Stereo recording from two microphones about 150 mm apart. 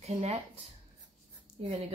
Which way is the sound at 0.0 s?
45° right (ahead or behind).